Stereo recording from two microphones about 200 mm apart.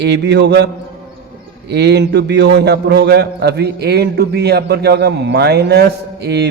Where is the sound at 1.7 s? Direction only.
55° right (ahead or behind).